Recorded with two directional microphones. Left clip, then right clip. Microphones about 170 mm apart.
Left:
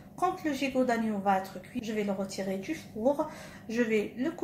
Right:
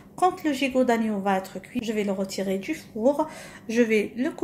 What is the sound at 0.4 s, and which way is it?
A woman's voice, 45° right (ahead or behind).